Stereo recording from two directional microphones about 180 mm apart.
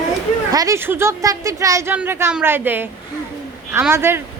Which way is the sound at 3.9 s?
15° right (ahead or behind).